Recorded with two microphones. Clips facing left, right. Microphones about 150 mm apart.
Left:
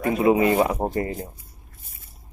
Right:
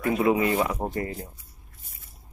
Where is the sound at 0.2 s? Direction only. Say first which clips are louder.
Left 6 dB; 25° left (ahead or behind).